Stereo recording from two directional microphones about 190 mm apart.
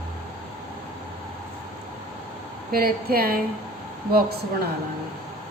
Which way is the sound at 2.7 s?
50° right (ahead or behind).